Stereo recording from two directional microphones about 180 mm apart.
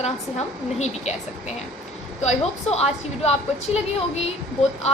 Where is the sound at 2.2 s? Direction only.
35° left (ahead or behind).